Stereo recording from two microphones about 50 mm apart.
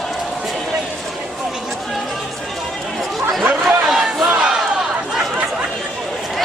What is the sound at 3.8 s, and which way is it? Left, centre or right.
Battle cry, centre.